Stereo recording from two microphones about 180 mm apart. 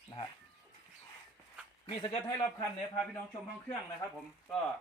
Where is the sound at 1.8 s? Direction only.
25° left (ahead or behind).